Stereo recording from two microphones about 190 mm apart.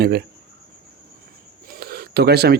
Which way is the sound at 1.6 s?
50° right (ahead or behind).